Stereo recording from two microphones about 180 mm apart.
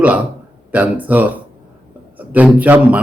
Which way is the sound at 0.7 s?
10° right (ahead or behind).